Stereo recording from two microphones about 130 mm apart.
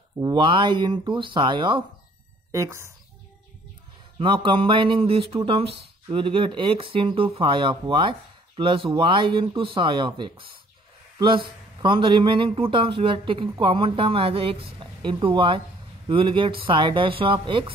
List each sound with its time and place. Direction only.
0.2 s a man's voice: 35° right (ahead or behind)
2.5 s speech: 20° right (ahead or behind)
4.2 s a man's voice: 40° right (ahead or behind)